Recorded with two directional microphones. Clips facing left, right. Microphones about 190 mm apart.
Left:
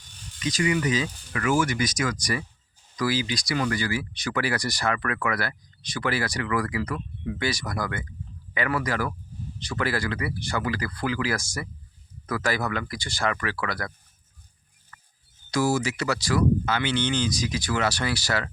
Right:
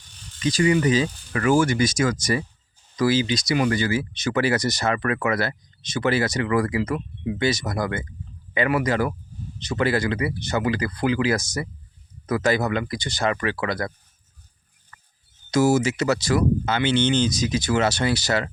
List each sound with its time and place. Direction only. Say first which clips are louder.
0.3 s speech: right 5 dB; 30° right (ahead or behind)
15.4 s speech: right 5 dB; 25° right (ahead or behind)